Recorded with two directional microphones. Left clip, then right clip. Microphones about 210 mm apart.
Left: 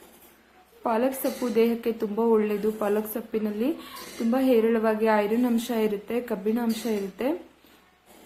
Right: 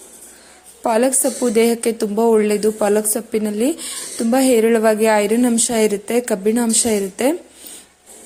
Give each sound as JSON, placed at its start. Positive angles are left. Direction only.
{"t": 0.8, "sound": "speech", "side_deg": -35}